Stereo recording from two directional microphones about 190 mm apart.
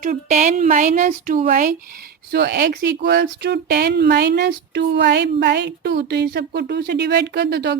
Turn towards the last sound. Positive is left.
turn(degrees=-65)  # may be behind; listen again after turning